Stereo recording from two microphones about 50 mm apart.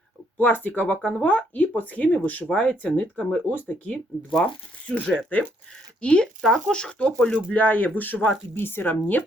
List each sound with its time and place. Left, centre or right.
0.3 s speech: left
3.5 s speech: left
3.9 s speech: centre
5.3 s speech: left
6.0 s speech: left
7.5 s speech: left